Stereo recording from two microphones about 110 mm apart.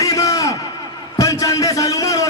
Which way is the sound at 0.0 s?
30° left (ahead or behind).